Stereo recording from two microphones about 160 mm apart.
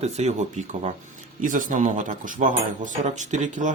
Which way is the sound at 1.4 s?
55° right (ahead or behind).